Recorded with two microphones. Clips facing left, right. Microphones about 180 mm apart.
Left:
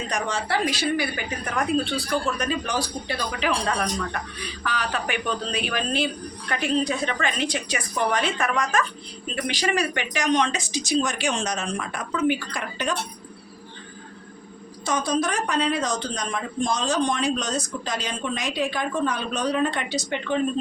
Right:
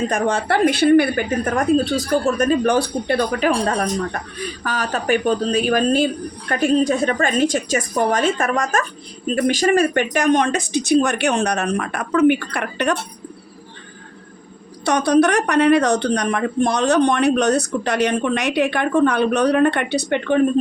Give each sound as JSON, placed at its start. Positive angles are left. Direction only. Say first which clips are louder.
{"t": 0.1, "sound": "a woman's voice", "louder": "right 7 dB", "side_deg": -55}
{"t": 14.8, "sound": "speech", "louder": "right 9 dB", "side_deg": -70}